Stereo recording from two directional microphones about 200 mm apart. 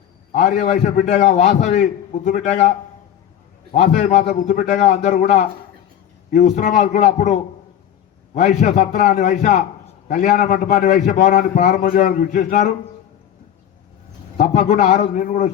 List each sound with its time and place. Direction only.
0.3 s a man's voice: 35° left (ahead or behind)
3.7 s a man's voice: 40° left (ahead or behind)
14.3 s a man's voice: 35° left (ahead or behind)